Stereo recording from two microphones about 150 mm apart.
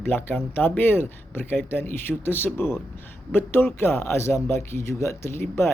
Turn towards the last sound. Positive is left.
turn(degrees=15)  # may be behind; listen again after turning